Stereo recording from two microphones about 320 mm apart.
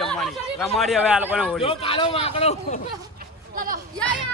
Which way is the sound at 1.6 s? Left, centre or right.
Centre.